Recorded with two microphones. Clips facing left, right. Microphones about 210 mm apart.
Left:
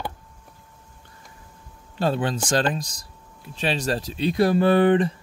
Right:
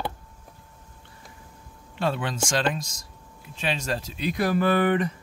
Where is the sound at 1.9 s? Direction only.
35° left (ahead or behind).